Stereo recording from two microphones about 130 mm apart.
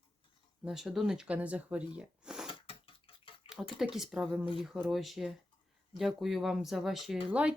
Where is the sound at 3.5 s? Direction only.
45° left (ahead or behind).